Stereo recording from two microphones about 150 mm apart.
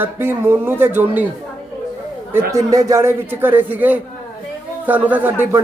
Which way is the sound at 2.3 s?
20° right (ahead or behind).